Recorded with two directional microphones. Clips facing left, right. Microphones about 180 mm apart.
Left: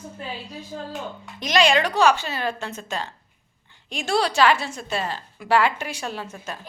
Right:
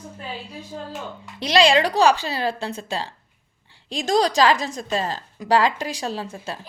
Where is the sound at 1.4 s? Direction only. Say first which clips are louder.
Right 2 dB; 30° right (ahead or behind).